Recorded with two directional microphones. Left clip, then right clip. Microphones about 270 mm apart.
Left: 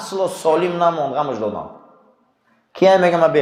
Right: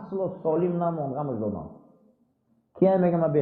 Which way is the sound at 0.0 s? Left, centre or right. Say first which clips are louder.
Left 9 dB; left.